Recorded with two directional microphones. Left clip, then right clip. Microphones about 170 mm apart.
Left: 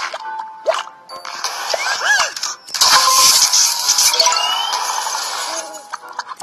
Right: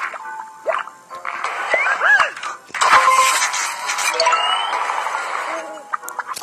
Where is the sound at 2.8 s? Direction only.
50° left (ahead or behind).